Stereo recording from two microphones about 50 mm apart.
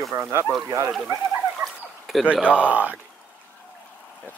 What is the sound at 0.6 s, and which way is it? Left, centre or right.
Speech, right.